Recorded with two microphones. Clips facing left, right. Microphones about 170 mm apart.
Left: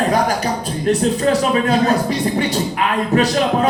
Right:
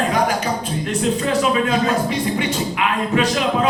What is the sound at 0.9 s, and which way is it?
Speech, 40° left (ahead or behind).